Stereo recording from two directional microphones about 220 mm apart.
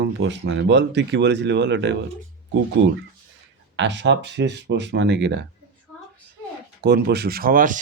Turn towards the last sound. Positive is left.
turn(degrees=-40)  # may be behind; listen again after turning